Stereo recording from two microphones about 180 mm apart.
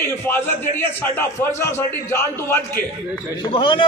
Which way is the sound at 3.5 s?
30° left (ahead or behind).